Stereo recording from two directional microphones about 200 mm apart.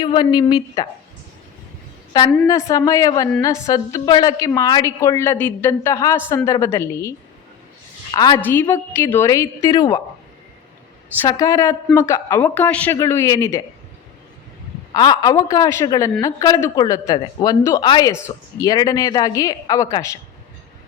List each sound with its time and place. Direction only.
0.0 s a woman's voice: 20° left (ahead or behind)
2.5 s speech: 15° left (ahead or behind)
8.1 s a woman's voice: 20° left (ahead or behind)
11.2 s speech: 15° left (ahead or behind)
14.9 s a woman's voice: 20° left (ahead or behind)